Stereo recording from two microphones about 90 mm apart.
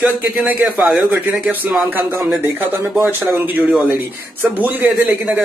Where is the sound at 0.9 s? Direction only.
20° right (ahead or behind).